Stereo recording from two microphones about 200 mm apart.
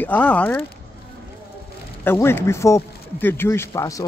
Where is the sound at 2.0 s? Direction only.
10° left (ahead or behind).